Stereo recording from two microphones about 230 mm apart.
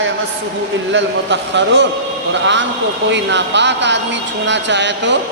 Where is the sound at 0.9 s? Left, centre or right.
Right.